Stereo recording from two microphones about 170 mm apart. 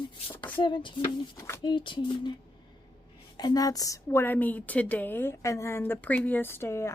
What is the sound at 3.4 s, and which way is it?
A woman's voice, 25° left (ahead or behind).